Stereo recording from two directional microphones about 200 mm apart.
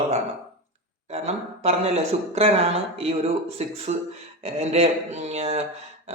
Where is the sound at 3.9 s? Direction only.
35° right (ahead or behind).